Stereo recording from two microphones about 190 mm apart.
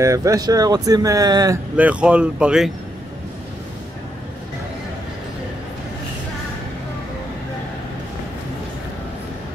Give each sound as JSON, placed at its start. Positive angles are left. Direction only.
{"t": 0.0, "sound": "speech", "side_deg": -15}
{"t": 1.8, "sound": "speech", "side_deg": -5}